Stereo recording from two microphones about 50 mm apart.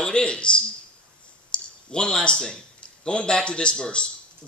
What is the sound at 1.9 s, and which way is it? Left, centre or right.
A man's voice, centre.